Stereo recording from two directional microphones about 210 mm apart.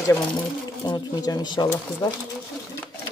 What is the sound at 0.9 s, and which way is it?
Speech, 20° left (ahead or behind).